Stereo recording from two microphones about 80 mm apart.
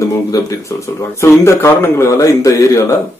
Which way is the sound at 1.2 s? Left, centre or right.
Left.